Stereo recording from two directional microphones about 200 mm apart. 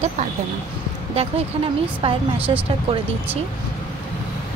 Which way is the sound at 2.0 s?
25° right (ahead or behind).